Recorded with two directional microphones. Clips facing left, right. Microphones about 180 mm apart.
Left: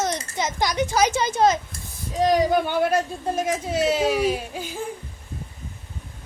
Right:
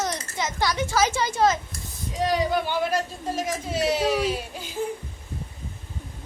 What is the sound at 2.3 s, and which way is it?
A woman's voice, 50° left (ahead or behind).